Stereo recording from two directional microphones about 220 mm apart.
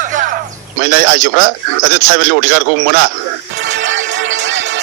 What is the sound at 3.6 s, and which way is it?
Music, 55° right (ahead or behind).